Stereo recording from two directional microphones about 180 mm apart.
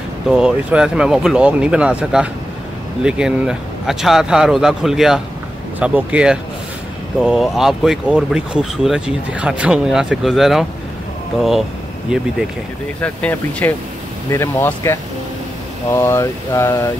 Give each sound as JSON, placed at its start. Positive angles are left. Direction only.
{"t": 0.3, "sound": "speech", "side_deg": -5}
{"t": 12.1, "sound": "speech", "side_deg": -5}
{"t": 13.0, "sound": "speech", "side_deg": 5}